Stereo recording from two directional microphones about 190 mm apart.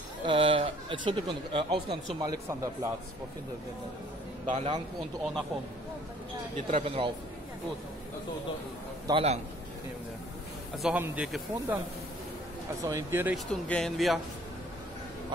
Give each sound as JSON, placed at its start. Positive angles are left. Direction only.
{"t": 0.3, "sound": "speech", "side_deg": -30}
{"t": 4.5, "sound": "a man's voice", "side_deg": -35}
{"t": 6.7, "sound": "speech", "side_deg": -30}
{"t": 9.0, "sound": "a man's voice", "side_deg": -30}
{"t": 10.8, "sound": "speech", "side_deg": -5}
{"t": 12.8, "sound": "speech", "side_deg": -15}
{"t": 13.5, "sound": "speech", "side_deg": 5}